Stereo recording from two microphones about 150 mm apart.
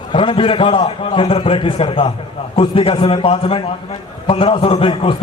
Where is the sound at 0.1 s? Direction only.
35° left (ahead or behind).